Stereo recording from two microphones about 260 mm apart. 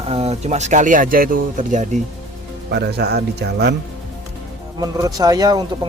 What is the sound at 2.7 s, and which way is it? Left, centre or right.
A man's voice, right.